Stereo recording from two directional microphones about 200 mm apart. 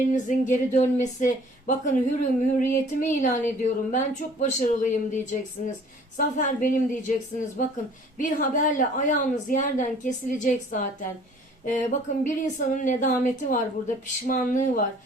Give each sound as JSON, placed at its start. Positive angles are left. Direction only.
{"t": 0.0, "sound": "speech", "side_deg": 40}